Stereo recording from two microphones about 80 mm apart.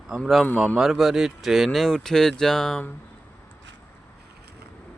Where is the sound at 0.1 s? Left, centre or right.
Centre.